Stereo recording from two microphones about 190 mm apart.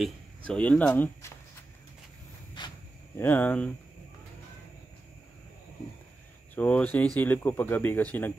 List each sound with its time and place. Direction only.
0.5 s speech: 5° left (ahead or behind)
2.6 s cricket: 25° left (ahead or behind)
3.2 s speech: 10° left (ahead or behind)
6.5 s speech: 10° left (ahead or behind)